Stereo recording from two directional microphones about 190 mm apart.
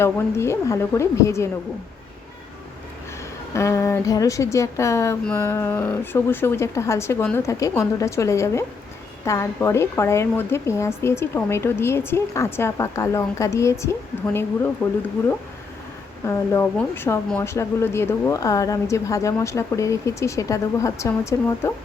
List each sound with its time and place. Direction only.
0.0 s speech: 15° left (ahead or behind)
3.5 s speech: 15° left (ahead or behind)
16.2 s speech: 15° left (ahead or behind)